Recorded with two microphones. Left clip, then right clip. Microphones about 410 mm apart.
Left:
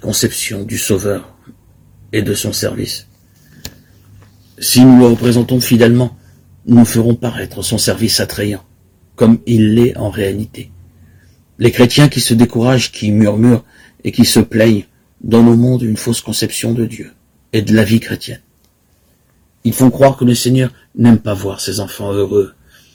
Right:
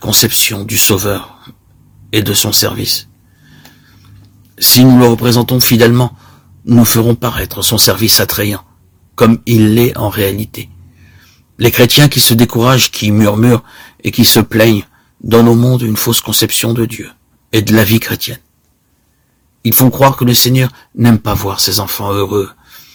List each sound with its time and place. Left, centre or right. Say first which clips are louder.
0.0 s speech: right 6 dB; right
2.0 s speech: right 4 dB; right
4.5 s speech: even; right
19.6 s speech: even; right